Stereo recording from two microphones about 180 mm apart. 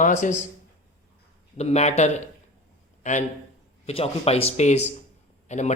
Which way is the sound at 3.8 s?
35° left (ahead or behind).